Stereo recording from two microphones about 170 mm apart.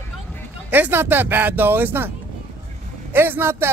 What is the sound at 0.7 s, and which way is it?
Speech, 10° right (ahead or behind).